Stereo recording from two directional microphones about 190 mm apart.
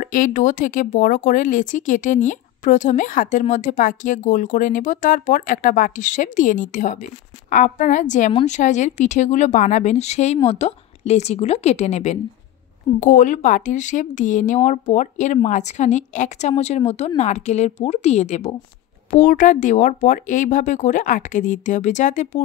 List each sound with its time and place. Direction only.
0.0 s speech: 45° left (ahead or behind)